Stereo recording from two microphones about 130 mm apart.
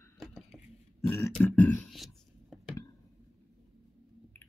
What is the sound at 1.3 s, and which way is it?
Beatboxing, 10° left (ahead or behind).